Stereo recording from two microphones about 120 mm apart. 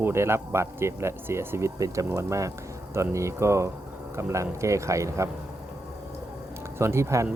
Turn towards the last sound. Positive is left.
turn(degrees=-25)  # may be behind; listen again after turning